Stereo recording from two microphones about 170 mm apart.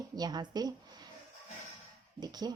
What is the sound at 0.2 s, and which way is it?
Speech, 25° right (ahead or behind).